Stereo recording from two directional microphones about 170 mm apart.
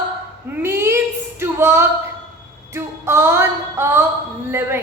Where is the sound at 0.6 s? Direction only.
15° right (ahead or behind).